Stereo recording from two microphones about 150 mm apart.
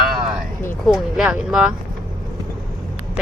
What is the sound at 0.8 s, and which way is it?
Speech, centre (ahead or behind).